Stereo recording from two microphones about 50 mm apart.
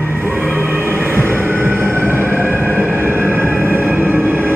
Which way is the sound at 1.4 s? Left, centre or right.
Right.